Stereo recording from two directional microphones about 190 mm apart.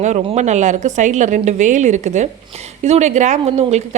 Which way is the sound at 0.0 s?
35° right (ahead or behind).